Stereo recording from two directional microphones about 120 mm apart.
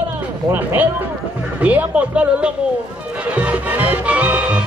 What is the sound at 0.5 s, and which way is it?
Speech, 15° right (ahead or behind).